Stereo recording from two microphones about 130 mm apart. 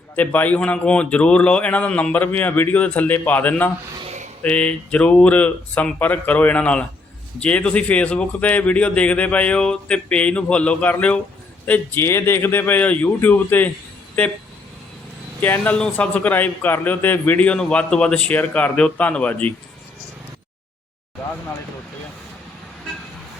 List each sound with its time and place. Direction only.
0.2 s a man's voice: 15° left (ahead or behind)
4.0 s a sound: 65° right (ahead or behind)
4.4 s a man's voice: 10° left (ahead or behind)
15.4 s a man's voice: 15° left (ahead or behind)